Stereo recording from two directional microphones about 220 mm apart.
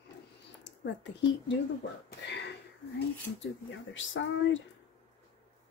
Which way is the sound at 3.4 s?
60° left (ahead or behind).